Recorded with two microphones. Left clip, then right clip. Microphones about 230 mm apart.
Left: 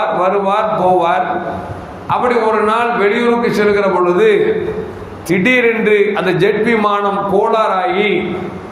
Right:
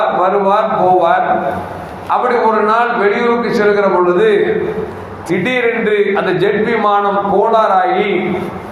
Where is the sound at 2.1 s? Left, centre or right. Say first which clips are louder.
Right 1 dB; left.